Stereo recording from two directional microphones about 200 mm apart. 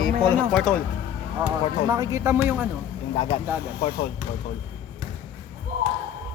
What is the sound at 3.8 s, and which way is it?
Speech, 55° left (ahead or behind).